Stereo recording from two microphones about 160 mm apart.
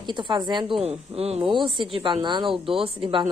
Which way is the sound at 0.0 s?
30° right (ahead or behind).